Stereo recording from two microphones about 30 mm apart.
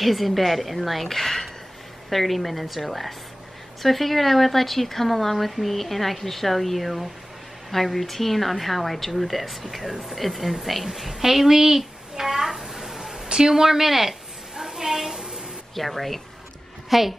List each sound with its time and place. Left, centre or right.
0.0 s a woman's voice: centre
14.5 s a sound: centre
15.7 s speech: centre